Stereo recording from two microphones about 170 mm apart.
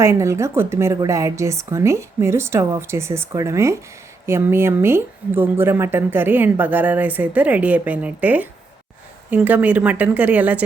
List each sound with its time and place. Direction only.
0.0 s speech: 15° right (ahead or behind)